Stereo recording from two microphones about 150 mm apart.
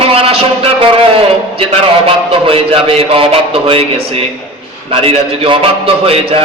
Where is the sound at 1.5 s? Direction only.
40° right (ahead or behind).